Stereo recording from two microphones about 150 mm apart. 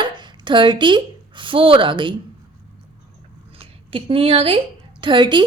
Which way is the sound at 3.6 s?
40° right (ahead or behind).